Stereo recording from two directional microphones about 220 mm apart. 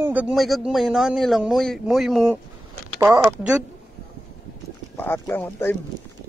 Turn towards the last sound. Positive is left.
turn(degrees=10)  # may be behind; listen again after turning